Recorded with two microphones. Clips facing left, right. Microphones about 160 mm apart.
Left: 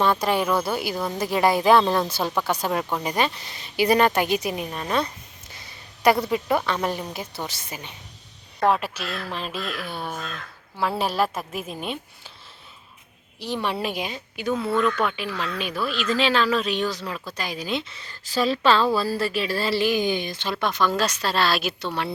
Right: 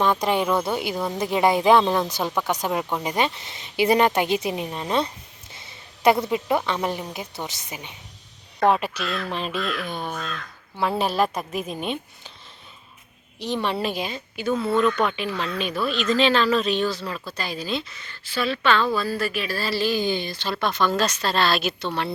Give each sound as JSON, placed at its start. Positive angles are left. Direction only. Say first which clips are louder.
{"t": 0.0, "sound": "speech", "louder": "even", "side_deg": -15}
{"t": 8.6, "sound": "a woman's voice", "louder": "right 2 dB", "side_deg": 0}
{"t": 13.4, "sound": "a woman's voice", "louder": "right 2 dB", "side_deg": 10}
{"t": 17.9, "sound": "speech", "louder": "left 3 dB", "side_deg": 35}